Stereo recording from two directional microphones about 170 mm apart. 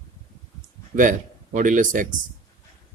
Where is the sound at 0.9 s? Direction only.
50° right (ahead or behind).